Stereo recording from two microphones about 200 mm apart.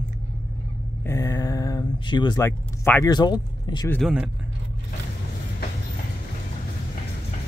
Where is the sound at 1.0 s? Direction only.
15° left (ahead or behind).